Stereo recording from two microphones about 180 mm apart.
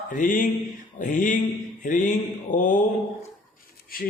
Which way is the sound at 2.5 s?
45° left (ahead or behind).